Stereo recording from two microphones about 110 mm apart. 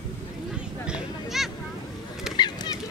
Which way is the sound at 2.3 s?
40° left (ahead or behind).